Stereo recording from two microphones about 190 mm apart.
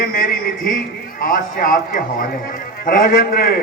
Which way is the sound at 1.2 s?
50° left (ahead or behind).